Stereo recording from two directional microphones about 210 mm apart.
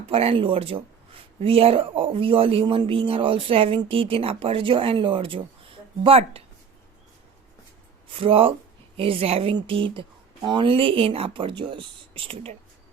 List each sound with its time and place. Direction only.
0.1 s speech: 30° right (ahead or behind)
8.1 s speech: 25° right (ahead or behind)